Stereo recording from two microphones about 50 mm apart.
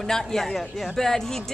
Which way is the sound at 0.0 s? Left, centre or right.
Centre.